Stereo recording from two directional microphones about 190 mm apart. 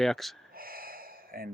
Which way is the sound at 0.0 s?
Centre (ahead or behind).